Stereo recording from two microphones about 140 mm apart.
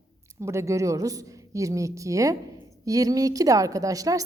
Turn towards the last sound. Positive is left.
turn(degrees=-25)  # may be behind; listen again after turning